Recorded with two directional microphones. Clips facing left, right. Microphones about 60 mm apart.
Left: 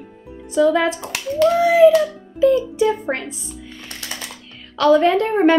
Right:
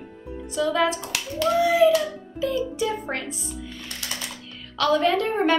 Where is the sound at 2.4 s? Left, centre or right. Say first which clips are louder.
Left 9 dB; left.